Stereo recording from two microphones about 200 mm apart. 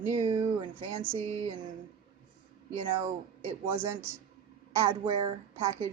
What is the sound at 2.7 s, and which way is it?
Speech, 30° right (ahead or behind).